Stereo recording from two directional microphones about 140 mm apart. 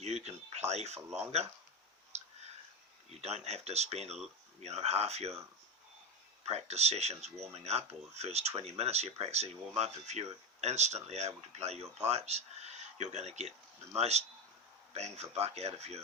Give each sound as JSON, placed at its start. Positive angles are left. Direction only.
{"t": 0.0, "sound": "speech", "side_deg": -50}
{"t": 2.1, "sound": "clicking", "side_deg": -50}
{"t": 3.1, "sound": "speech", "side_deg": -50}
{"t": 6.4, "sound": "speech", "side_deg": -50}